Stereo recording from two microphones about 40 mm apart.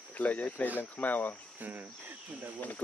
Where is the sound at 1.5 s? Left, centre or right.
Right.